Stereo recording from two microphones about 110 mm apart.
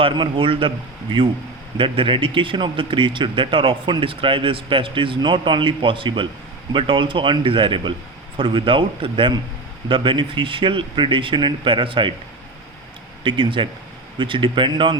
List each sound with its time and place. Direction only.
0.0 s speech: 50° right (ahead or behind)
1.8 s speech: 50° right (ahead or behind)
13.2 s speech: 50° right (ahead or behind)